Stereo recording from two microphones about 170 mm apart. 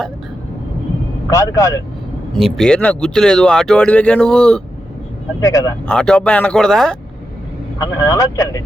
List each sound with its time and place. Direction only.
1.3 s speech: 20° left (ahead or behind)
2.3 s speech: 5° left (ahead or behind)
5.4 s speech: 20° left (ahead or behind)
5.9 s speech: 5° left (ahead or behind)
8.0 s speech: 20° left (ahead or behind)